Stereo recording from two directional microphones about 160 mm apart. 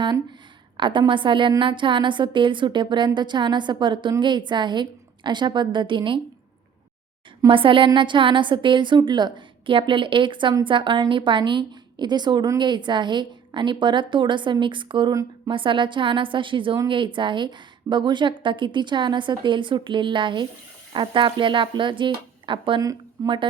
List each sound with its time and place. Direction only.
0.8 s a woman's voice: 30° right (ahead or behind)
7.4 s a woman's voice: 30° right (ahead or behind)